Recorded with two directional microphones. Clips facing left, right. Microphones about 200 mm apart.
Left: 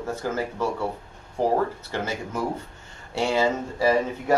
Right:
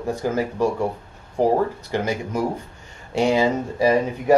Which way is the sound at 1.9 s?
15° right (ahead or behind).